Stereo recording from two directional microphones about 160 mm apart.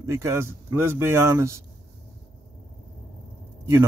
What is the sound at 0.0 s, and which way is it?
Speech, 20° right (ahead or behind).